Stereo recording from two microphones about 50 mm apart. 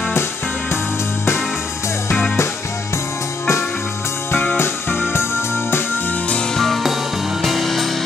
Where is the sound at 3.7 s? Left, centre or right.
Left.